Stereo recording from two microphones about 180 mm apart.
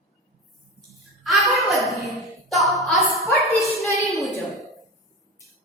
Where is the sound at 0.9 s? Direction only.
Centre (ahead or behind).